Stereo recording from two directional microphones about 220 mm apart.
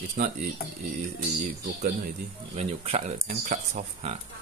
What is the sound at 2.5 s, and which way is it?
Speech, 30° right (ahead or behind).